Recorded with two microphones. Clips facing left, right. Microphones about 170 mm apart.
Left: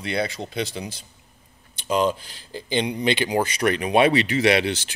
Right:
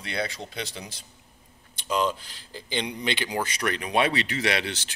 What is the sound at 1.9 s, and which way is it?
Speech, 15° left (ahead or behind).